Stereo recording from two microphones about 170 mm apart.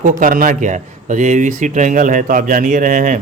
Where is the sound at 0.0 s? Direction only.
50° right (ahead or behind).